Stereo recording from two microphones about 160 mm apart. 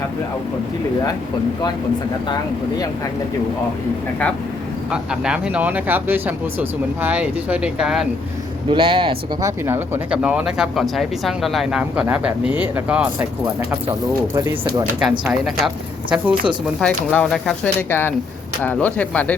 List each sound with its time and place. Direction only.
2.3 s speech: 25° left (ahead or behind)
4.9 s speech: 5° right (ahead or behind)
8.7 s speech: 30° right (ahead or behind)
9.4 s speech: 15° right (ahead or behind)
14.3 s speech: 15° right (ahead or behind)
15.3 s speech: centre (ahead or behind)
16.8 s speech: 10° left (ahead or behind)